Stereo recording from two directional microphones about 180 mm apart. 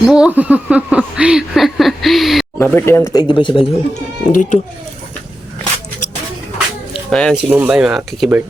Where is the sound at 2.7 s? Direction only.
15° left (ahead or behind).